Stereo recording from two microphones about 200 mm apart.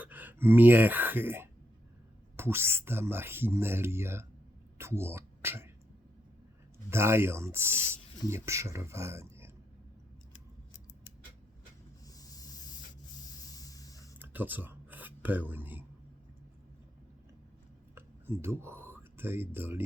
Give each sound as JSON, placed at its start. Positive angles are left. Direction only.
{"t": 0.0, "sound": "speech", "side_deg": -10}
{"t": 6.9, "sound": "speech", "side_deg": -10}
{"t": 12.1, "sound": "hiss", "side_deg": 20}
{"t": 13.2, "sound": "vehicle", "side_deg": 20}
{"t": 14.2, "sound": "a sound", "side_deg": -10}
{"t": 17.9, "sound": "a sound", "side_deg": -10}